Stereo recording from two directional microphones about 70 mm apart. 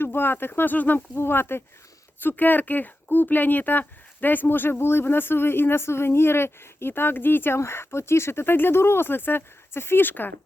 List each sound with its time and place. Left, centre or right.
0.0 s speech: left